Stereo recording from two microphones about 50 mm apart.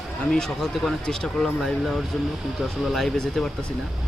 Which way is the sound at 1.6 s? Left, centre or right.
Centre.